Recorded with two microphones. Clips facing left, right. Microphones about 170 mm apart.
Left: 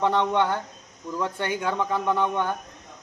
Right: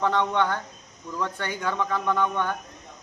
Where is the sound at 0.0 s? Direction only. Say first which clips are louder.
Left 1 dB; 15° left (ahead or behind).